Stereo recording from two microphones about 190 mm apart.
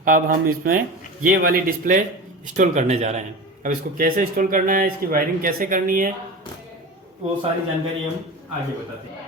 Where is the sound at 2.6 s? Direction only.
40° right (ahead or behind).